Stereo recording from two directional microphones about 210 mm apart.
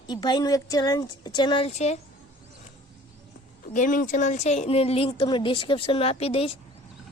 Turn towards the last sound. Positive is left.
turn(degrees=25)  # may be behind; listen again after turning